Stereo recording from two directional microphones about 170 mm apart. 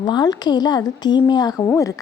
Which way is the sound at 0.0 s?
25° left (ahead or behind).